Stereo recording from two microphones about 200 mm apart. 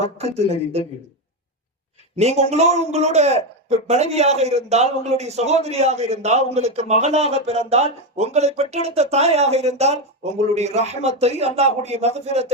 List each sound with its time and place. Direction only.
0.2 s a man's voice: 30° right (ahead or behind)
2.1 s a man's voice: 35° right (ahead or behind)